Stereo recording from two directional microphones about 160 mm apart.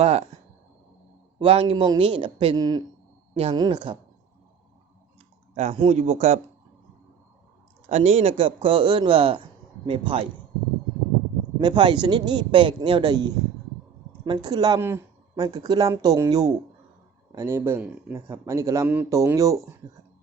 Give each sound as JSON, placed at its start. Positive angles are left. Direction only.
{"t": 0.0, "sound": "speech", "side_deg": -40}
{"t": 1.4, "sound": "speech", "side_deg": -35}
{"t": 5.5, "sound": "speech", "side_deg": -40}
{"t": 7.9, "sound": "speech", "side_deg": -40}
{"t": 11.5, "sound": "speech", "side_deg": -25}